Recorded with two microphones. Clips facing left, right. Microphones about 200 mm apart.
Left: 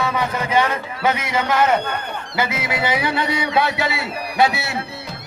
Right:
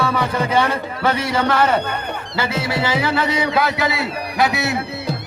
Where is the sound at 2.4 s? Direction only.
30° right (ahead or behind).